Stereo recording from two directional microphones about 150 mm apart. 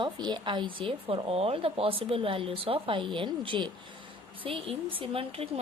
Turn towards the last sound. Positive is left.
turn(degrees=-40)  # may be behind; listen again after turning